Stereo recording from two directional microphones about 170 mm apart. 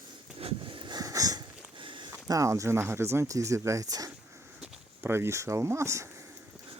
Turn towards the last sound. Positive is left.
turn(degrees=-15)  # may be behind; listen again after turning